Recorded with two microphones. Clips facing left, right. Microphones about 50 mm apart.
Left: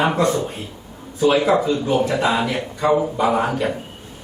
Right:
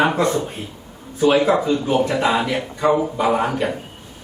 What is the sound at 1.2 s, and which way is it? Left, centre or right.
A man's voice, centre.